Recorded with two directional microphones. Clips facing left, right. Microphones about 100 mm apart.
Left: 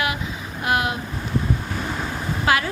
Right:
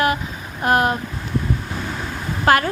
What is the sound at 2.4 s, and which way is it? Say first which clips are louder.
Speech: right 5 dB; 50° right (ahead or behind).